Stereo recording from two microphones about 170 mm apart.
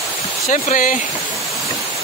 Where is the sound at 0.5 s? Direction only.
50° left (ahead or behind).